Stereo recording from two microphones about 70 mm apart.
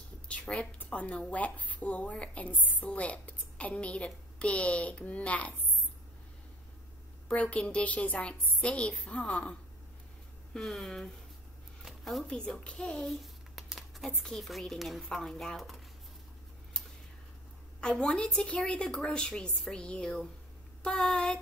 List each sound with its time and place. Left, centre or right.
0.3 s a woman's voice: centre
7.2 s a woman's voice: centre
10.5 s a woman's voice: centre
11.8 s a sound: centre
12.3 s a woman's voice: centre
13.0 s a sound: centre
14.2 s a woman's voice: centre
17.7 s a woman's voice: centre